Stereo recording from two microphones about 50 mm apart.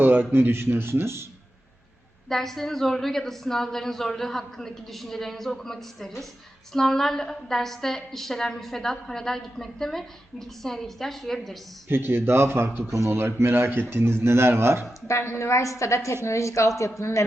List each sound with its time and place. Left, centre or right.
0.0 s speech: right
2.3 s a woman's voice: centre
11.9 s speech: right
12.9 s speech: right
13.1 s speech: right
15.0 s a woman's voice: left
17.0 s speech: left